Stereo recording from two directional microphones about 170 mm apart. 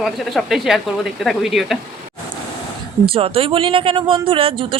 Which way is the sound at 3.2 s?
35° right (ahead or behind).